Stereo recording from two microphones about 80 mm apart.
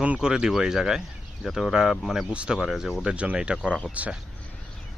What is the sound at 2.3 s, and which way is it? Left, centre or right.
Speech, centre.